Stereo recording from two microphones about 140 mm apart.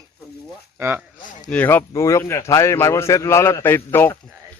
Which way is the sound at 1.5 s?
10° left (ahead or behind).